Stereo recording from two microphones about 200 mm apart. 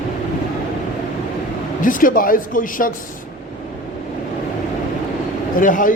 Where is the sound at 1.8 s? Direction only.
45° left (ahead or behind).